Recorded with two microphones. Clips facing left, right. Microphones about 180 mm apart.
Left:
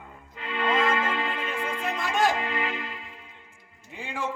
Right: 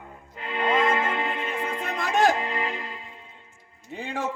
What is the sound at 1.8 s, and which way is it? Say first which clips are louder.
Music: right 3 dB; 45° right (ahead or behind).